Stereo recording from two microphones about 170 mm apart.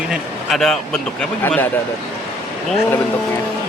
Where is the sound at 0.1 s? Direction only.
Centre (ahead or behind).